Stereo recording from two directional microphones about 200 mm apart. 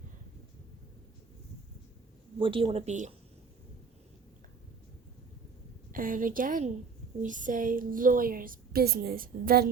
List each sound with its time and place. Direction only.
2.4 s speech: 25° right (ahead or behind)
5.9 s a woman's voice: 45° right (ahead or behind)